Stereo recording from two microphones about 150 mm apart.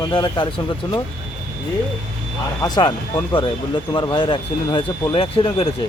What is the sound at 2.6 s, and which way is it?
Speech, 25° left (ahead or behind).